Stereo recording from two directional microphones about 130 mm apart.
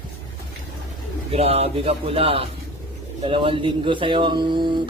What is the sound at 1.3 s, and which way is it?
A man's voice, 50° right (ahead or behind).